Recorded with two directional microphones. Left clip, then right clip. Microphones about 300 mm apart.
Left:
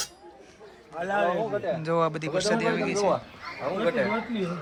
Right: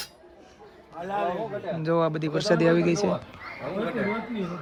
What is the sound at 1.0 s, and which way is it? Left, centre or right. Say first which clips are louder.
Speech: left 3 dB; left.